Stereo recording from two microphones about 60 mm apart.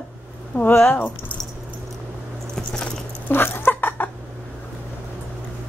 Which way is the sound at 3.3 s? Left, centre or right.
Left.